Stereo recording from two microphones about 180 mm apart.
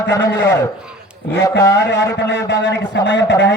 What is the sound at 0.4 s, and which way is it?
Speech, 15° left (ahead or behind).